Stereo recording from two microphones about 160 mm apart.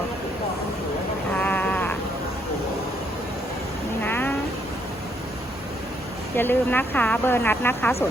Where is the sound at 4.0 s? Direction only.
10° left (ahead or behind).